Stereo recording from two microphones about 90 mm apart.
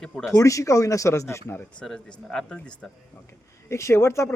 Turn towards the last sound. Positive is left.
turn(degrees=30)  # may be behind; listen again after turning